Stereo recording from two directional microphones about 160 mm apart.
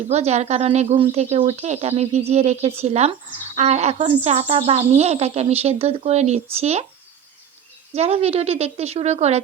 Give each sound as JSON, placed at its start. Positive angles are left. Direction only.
{"t": 0.1, "sound": "speech", "side_deg": -45}
{"t": 7.9, "sound": "speech", "side_deg": -40}